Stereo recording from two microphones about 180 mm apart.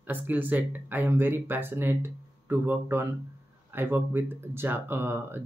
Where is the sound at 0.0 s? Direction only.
10° right (ahead or behind).